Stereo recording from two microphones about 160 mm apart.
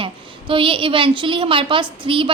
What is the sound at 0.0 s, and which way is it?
A woman's voice, 35° right (ahead or behind).